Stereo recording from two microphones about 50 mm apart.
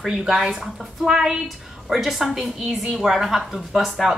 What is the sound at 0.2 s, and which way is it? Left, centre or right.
A woman's voice, centre.